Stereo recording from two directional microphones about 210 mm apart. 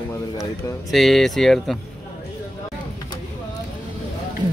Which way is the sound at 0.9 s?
Centre (ahead or behind).